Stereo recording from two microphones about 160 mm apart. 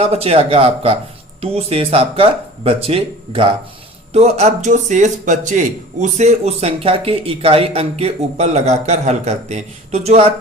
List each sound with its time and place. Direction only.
0.0 s a man's voice: 40° right (ahead or behind)